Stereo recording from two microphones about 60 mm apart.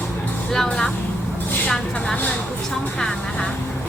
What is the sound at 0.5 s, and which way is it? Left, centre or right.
A woman's voice, centre.